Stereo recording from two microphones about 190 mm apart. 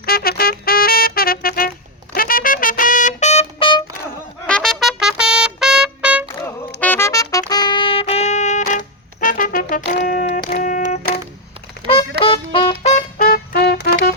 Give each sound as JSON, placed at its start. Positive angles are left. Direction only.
{"t": 0.0, "sound": "music", "side_deg": 55}
{"t": 4.4, "sound": "trumpet", "side_deg": 5}
{"t": 6.7, "sound": "music", "side_deg": 10}
{"t": 11.8, "sound": "music", "side_deg": -25}
{"t": 12.2, "sound": "music", "side_deg": 30}
{"t": 13.1, "sound": "music", "side_deg": 50}